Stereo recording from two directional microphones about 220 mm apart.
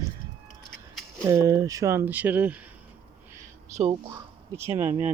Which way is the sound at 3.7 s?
30° right (ahead or behind).